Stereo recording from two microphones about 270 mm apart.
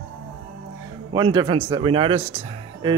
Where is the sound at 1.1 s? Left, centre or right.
Centre.